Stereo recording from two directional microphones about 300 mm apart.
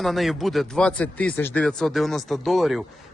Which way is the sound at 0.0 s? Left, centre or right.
Centre.